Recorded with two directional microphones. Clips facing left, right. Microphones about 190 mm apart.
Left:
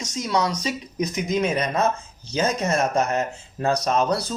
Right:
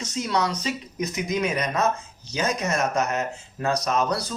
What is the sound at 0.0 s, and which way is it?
Speech, 10° left (ahead or behind).